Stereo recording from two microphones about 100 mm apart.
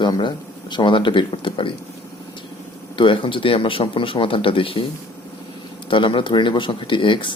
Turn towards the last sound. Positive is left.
turn(degrees=55)  # may be behind; listen again after turning